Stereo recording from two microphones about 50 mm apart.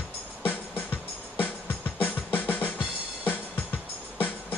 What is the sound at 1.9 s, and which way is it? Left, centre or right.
Music, left.